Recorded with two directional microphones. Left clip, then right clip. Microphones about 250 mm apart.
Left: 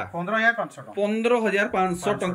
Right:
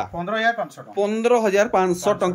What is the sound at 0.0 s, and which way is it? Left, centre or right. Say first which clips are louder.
Speech: right 1 dB; centre.